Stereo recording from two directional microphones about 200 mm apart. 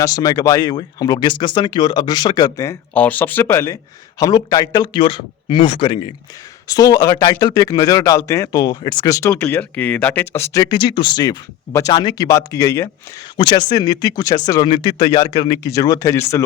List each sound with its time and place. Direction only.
0.0 s speech: 20° left (ahead or behind)